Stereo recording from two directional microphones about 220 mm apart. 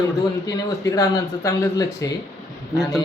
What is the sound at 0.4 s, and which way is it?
Speech, 15° left (ahead or behind).